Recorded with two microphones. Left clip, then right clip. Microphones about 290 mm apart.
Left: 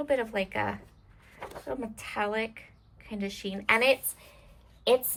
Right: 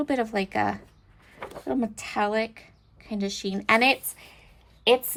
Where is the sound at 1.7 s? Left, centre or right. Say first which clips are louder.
Right 7 dB; centre.